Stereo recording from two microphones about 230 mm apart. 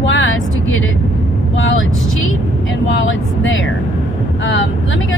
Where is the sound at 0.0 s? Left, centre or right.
Left.